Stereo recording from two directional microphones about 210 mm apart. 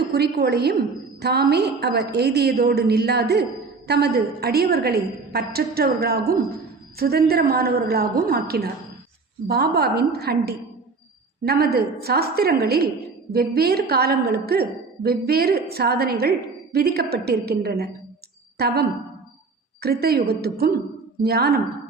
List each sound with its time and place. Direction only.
0.1 s a woman's voice: 50° right (ahead or behind)